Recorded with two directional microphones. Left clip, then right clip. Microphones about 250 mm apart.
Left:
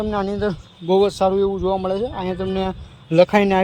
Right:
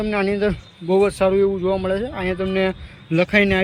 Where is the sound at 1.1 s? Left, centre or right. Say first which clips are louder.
Right 1 dB; centre.